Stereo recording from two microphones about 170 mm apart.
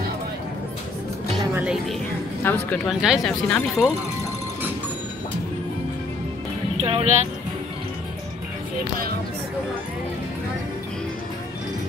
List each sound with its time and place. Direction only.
1.5 s music: 5° right (ahead or behind)
2.4 s speech: 10° left (ahead or behind)
2.9 s speech: 5° right (ahead or behind)
6.8 s speech: 35° right (ahead or behind)